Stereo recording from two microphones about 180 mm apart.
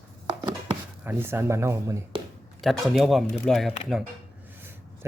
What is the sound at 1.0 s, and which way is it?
Speech, 10° right (ahead or behind).